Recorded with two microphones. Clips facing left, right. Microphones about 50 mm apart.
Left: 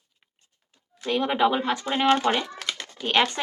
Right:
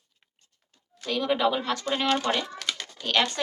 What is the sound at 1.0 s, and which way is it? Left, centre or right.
Speech, left.